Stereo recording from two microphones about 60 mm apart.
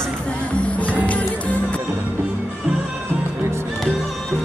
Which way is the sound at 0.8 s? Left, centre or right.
Left.